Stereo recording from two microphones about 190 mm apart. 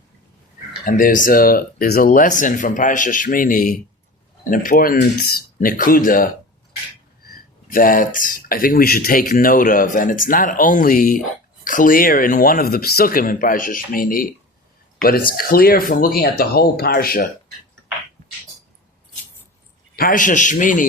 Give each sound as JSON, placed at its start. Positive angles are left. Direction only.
{"t": 0.9, "sound": "speech", "side_deg": 45}
{"t": 20.0, "sound": "speech", "side_deg": 45}